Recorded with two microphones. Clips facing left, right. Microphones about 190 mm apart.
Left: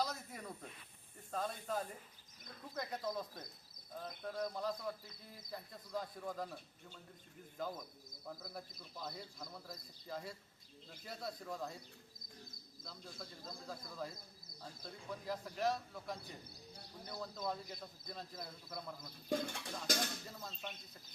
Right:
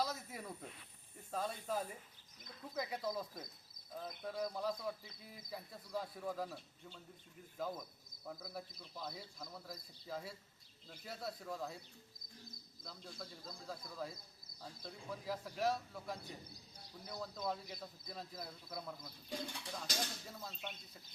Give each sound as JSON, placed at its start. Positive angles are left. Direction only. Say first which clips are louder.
{"t": 0.0, "sound": "snake", "louder": "even", "side_deg": -5}
{"t": 1.3, "sound": "speech", "louder": "even", "side_deg": -5}
{"t": 7.6, "sound": "speech", "louder": "right 1 dB", "side_deg": -5}
{"t": 12.8, "sound": "speech", "louder": "right 1 dB", "side_deg": 0}
{"t": 19.3, "sound": "speech", "louder": "left 7 dB", "side_deg": 50}
{"t": 19.7, "sound": "speech", "louder": "left 5 dB", "side_deg": 0}